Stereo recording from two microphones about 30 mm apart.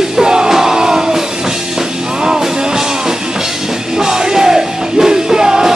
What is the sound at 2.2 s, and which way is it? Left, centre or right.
Music, centre.